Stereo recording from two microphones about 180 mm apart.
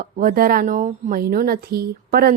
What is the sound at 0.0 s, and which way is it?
Speech, 50° right (ahead or behind).